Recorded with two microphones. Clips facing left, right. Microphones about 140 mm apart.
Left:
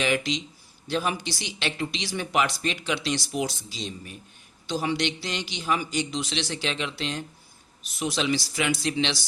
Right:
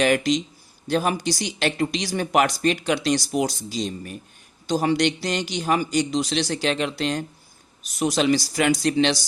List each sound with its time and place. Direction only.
0.0 s speech: 45° right (ahead or behind)